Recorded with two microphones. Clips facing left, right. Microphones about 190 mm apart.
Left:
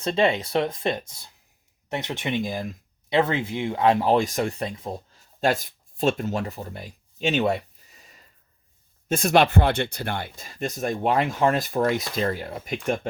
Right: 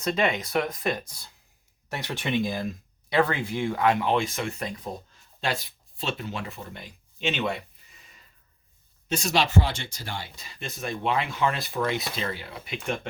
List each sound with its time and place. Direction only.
0.0 s speech: 30° left (ahead or behind)
5.4 s speech: 50° left (ahead or behind)
9.0 s speech: 55° left (ahead or behind)